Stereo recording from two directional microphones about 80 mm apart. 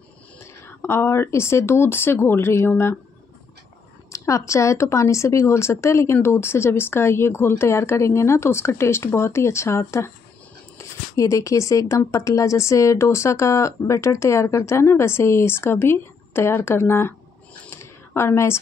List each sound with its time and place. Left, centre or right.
0.8 s speech: left
4.1 s speech: left
17.6 s a sound: left